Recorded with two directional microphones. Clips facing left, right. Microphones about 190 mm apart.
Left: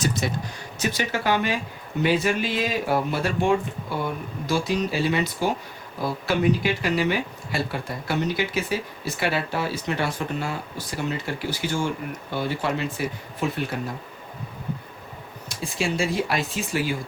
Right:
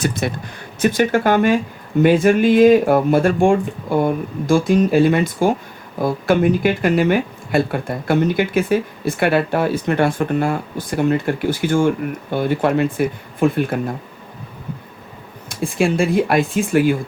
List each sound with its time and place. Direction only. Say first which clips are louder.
0.0 s speech: right 4 dB; 55° right (ahead or behind)
15.4 s speech: right 9 dB; 55° right (ahead or behind)